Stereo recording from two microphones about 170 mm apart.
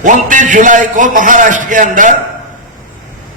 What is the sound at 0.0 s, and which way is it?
A man's voice, 50° right (ahead or behind).